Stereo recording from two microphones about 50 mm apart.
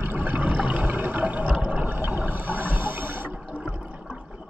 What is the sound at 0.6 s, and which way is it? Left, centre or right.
Water, right.